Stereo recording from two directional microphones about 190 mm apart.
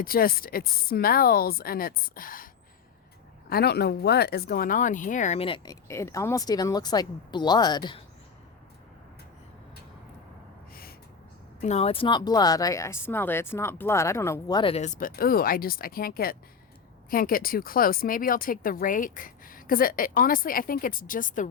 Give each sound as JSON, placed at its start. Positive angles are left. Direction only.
{"t": 0.0, "sound": "speech", "side_deg": 50}
{"t": 3.5, "sound": "speech", "side_deg": 55}
{"t": 5.6, "sound": "speech", "side_deg": 15}
{"t": 11.6, "sound": "speech", "side_deg": 35}